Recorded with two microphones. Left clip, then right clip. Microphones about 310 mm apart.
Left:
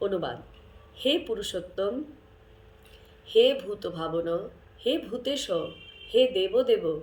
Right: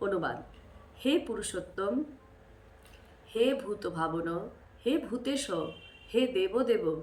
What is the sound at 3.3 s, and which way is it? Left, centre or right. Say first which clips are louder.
A woman's voice: left 7 dB; centre.